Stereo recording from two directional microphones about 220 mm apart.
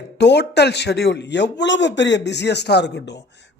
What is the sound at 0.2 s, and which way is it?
Speech, 50° left (ahead or behind).